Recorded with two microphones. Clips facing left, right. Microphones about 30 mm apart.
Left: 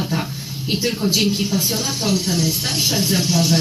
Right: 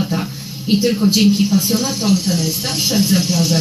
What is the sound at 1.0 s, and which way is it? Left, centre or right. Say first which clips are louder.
Speech: right 2 dB; right.